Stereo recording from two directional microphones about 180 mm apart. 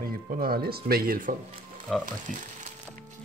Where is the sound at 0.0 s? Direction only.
55° right (ahead or behind).